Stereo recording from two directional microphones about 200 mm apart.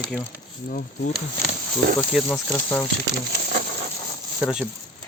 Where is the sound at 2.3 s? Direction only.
10° left (ahead or behind).